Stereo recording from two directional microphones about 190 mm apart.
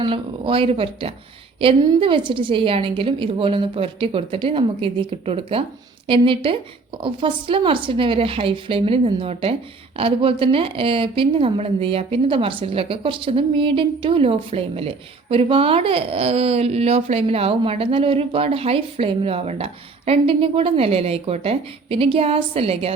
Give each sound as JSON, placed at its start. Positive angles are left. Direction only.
{"t": 0.0, "sound": "a woman's voice", "side_deg": -25}